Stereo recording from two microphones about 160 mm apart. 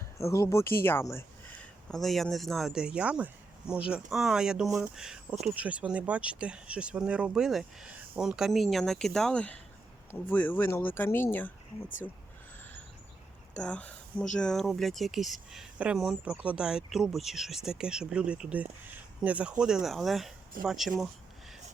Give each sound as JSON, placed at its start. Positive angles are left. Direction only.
{"t": 0.2, "sound": "speech", "side_deg": 20}
{"t": 1.9, "sound": "speech", "side_deg": 0}
{"t": 13.5, "sound": "speech", "side_deg": 5}